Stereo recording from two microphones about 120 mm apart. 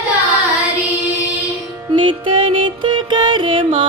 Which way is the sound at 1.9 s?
40° right (ahead or behind).